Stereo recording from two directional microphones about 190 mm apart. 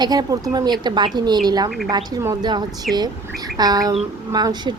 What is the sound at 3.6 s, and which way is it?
Speech, 20° right (ahead or behind).